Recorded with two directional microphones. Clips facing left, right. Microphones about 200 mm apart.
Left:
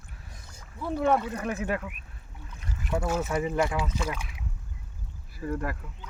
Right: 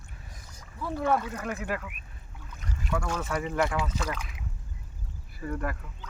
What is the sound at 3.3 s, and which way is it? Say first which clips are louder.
Speech: left 2 dB; 25° left (ahead or behind).